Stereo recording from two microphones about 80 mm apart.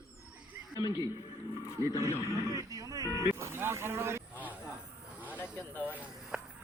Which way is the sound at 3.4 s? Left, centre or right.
Right.